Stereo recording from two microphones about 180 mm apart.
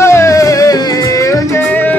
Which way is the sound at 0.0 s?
15° left (ahead or behind).